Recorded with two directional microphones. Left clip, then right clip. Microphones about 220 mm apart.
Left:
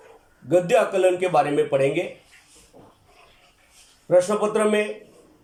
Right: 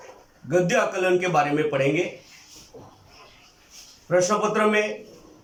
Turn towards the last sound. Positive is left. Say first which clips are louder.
# even
turn(degrees=20)  # may be behind; listen again after turning